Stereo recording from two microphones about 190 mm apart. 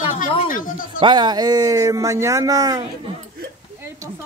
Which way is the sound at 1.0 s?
25° right (ahead or behind).